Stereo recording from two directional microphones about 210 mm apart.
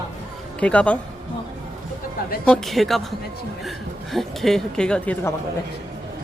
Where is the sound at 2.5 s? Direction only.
Centre (ahead or behind).